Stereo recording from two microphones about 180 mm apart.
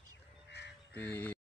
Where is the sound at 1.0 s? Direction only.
10° left (ahead or behind).